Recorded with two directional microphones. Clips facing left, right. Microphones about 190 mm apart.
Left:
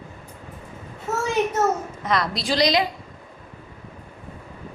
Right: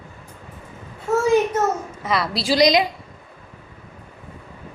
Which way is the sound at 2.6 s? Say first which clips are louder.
Right 4 dB; 15° right (ahead or behind).